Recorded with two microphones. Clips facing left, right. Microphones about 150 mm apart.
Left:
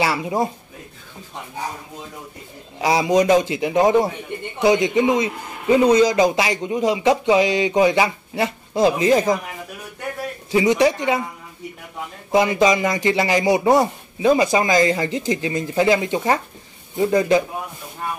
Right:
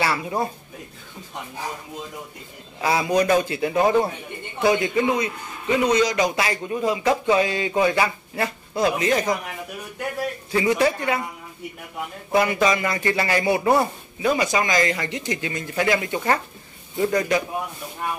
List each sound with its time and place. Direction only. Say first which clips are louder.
0.0 s a man's voice: left 3 dB; 15° left (ahead or behind)
2.8 s a man's voice: left 3 dB; 15° left (ahead or behind)
10.5 s a man's voice: left 4 dB; 15° left (ahead or behind)
12.3 s a man's voice: left 3 dB; 20° left (ahead or behind)
14.2 s a man's voice: left 5 dB; 25° left (ahead or behind)